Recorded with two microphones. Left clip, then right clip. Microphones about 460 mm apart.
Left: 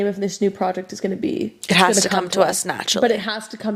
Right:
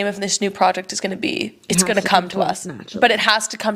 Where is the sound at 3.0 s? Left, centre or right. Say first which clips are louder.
Right 9 dB; right.